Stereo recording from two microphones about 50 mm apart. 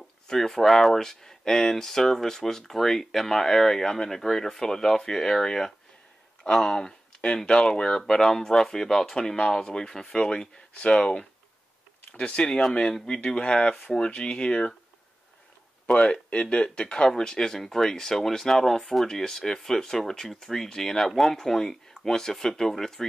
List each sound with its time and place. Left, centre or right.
0.3 s speech: centre
15.9 s speech: left; by 23.0 s centre